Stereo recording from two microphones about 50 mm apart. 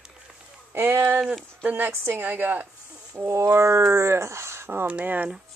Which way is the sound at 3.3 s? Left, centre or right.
Right.